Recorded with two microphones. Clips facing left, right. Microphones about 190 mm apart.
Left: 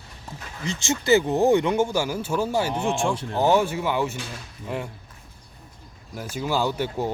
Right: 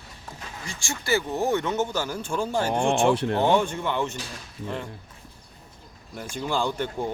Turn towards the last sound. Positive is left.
turn(degrees=5)  # may be behind; listen again after turning